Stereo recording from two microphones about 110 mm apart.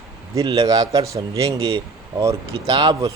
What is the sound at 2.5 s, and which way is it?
Speech, 45° right (ahead or behind).